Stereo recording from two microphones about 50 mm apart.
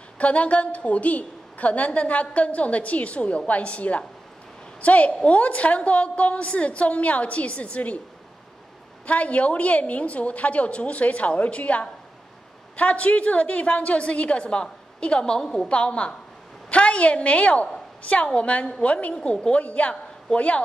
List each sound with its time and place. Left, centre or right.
0.2 s a woman's voice: left
9.0 s a woman's voice: left; by 15.7 s centre
15.7 s a woman's voice: left